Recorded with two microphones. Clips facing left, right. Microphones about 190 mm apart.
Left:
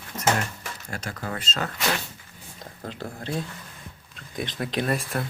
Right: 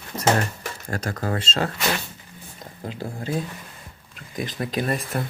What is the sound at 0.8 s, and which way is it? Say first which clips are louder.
Speech: right 7 dB; 40° right (ahead or behind).